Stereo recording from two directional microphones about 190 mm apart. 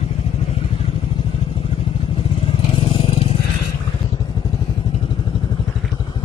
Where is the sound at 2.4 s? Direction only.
30° left (ahead or behind).